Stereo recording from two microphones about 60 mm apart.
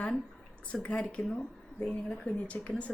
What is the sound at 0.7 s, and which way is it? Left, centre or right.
A woman's voice, centre.